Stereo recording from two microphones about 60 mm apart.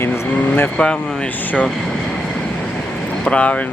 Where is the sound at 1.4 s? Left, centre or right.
Left.